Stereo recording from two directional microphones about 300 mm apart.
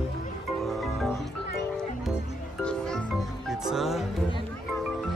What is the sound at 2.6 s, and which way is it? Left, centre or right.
Music, centre.